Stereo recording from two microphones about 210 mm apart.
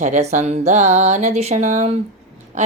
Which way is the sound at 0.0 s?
35° right (ahead or behind).